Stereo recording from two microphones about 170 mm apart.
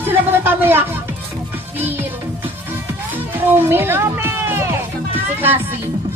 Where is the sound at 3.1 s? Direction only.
10° right (ahead or behind).